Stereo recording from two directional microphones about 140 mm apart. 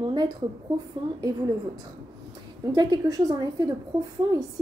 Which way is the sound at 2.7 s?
30° right (ahead or behind).